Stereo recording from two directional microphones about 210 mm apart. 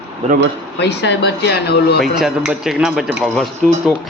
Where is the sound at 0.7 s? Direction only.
55° left (ahead or behind).